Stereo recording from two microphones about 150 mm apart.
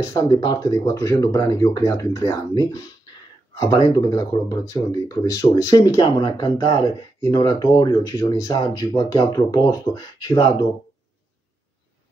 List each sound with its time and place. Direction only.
0.0 s speech: 25° left (ahead or behind)